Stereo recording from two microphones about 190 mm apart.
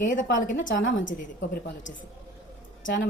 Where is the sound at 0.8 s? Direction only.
80° left.